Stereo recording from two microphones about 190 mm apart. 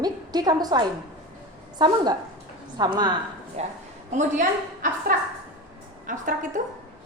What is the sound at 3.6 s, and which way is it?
Speech, 35° right (ahead or behind).